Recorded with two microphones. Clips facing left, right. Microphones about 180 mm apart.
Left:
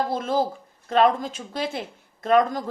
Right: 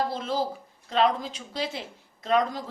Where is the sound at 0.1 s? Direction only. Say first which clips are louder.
Left 5 dB; 50° left (ahead or behind).